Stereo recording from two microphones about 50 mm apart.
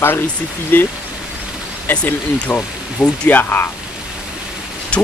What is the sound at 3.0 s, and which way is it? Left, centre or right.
Speech, left.